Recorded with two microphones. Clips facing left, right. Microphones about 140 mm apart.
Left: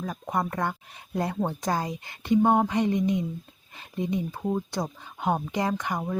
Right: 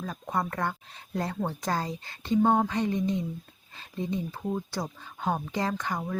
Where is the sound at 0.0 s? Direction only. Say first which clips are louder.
Left 2 dB; 10° left (ahead or behind).